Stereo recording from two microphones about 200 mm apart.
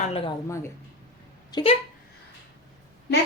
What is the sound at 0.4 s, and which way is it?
Speech, 15° left (ahead or behind).